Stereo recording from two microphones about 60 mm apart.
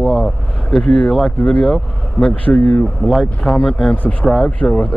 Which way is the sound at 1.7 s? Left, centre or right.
Centre.